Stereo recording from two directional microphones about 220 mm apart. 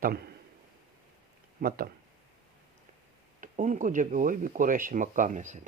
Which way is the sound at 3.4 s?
35° right (ahead or behind).